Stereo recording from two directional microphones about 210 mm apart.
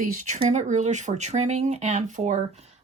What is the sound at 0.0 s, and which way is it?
Speech, 35° right (ahead or behind).